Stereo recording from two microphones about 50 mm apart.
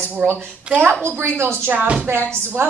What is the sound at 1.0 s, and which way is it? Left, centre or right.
Speech, right.